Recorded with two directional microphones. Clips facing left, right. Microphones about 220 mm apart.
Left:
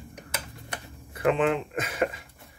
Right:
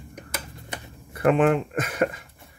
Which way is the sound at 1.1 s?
50° right (ahead or behind).